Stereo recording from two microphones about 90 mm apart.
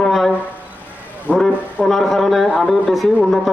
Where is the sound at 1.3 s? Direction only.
15° right (ahead or behind).